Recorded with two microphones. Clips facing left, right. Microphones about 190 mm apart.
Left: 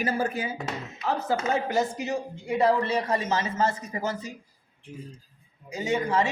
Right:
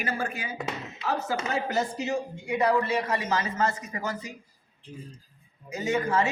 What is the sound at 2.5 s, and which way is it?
A man's voice, 30° left (ahead or behind).